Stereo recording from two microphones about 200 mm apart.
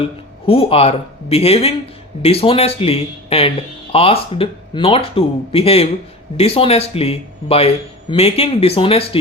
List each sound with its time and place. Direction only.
0.4 s speech: 30° left (ahead or behind)